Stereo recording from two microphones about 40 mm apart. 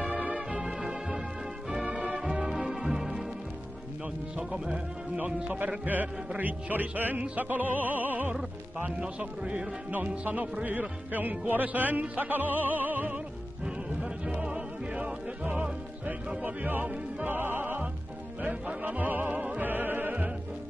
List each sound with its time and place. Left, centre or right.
0.0 s music: right
0.5 s music: right
1.9 s music: right
2.1 s music: centre
4.5 s speech: centre
5.2 s music: right
9.0 s a man's voice: right
9.8 s speech: right
11.1 s music: right
14.2 s music: right
16.4 s music: right
17.3 s music: right
18.8 s music: right
19.6 s opera: right